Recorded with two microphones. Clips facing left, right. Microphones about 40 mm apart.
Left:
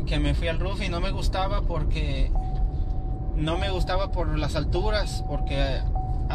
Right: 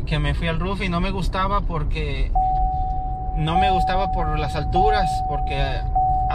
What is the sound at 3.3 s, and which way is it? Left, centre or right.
Speech, right.